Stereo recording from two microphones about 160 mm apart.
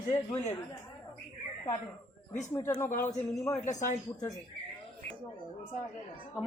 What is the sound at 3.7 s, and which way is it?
Speech, 50° left (ahead or behind).